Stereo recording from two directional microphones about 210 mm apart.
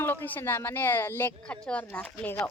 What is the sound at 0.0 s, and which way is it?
A woman's voice, 10° left (ahead or behind).